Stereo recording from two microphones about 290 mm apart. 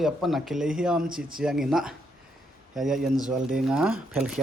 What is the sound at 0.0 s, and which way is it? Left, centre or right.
Speech, centre.